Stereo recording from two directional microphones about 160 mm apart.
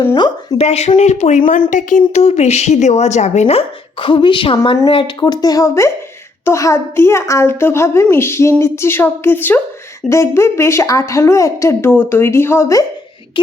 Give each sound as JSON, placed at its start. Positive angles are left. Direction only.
{"t": 0.0, "sound": "a woman's voice", "side_deg": 35}
{"t": 2.2, "sound": "a woman's voice", "side_deg": 45}
{"t": 4.0, "sound": "a woman's voice", "side_deg": 30}
{"t": 13.4, "sound": "speech", "side_deg": 30}